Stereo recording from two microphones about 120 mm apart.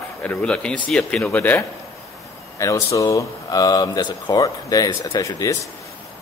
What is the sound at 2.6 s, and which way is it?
Speech, 25° left (ahead or behind).